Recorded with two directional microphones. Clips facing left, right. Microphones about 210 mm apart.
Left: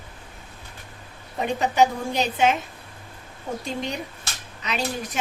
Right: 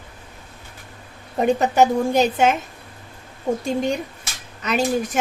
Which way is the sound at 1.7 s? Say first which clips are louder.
Right 5 dB; 50° right (ahead or behind).